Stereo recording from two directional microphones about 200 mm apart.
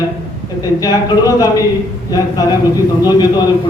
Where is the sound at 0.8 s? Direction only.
20° left (ahead or behind).